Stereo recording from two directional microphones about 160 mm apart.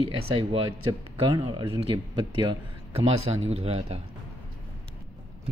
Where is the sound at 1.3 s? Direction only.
30° right (ahead or behind).